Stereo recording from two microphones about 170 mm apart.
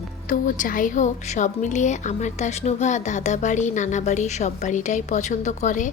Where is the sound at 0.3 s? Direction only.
50° left (ahead or behind).